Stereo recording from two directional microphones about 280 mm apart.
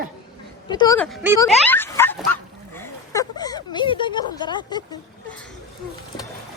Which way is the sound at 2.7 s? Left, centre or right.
Centre.